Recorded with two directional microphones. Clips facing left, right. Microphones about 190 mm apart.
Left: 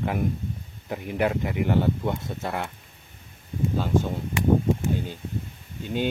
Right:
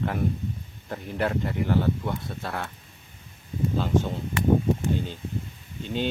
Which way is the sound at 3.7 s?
10° left (ahead or behind).